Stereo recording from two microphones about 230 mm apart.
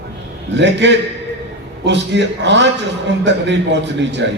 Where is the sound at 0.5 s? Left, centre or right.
Right.